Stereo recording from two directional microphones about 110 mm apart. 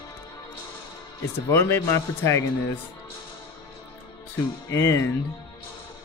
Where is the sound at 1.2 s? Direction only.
25° left (ahead or behind).